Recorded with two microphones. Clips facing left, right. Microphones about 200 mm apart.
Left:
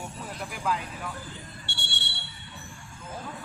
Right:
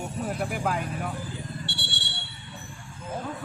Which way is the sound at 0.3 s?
55° right (ahead or behind).